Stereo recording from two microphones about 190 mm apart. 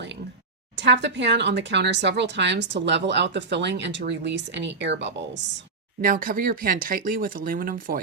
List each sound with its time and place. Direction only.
0.8 s a woman's voice: 65° right (ahead or behind)
6.0 s speech: 45° right (ahead or behind)